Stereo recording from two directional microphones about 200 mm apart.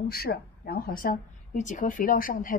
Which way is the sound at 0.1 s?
50° left (ahead or behind).